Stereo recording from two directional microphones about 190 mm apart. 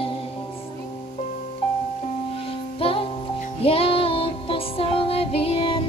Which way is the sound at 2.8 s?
30° left (ahead or behind).